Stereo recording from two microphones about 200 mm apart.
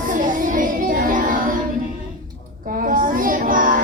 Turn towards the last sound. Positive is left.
turn(degrees=-45)  # may be behind; listen again after turning